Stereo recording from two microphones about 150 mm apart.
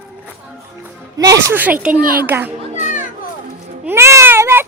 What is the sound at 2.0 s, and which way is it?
Speech, 75° right (ahead or behind).